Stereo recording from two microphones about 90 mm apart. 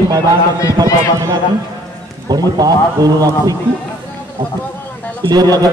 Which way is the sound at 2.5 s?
45° right (ahead or behind).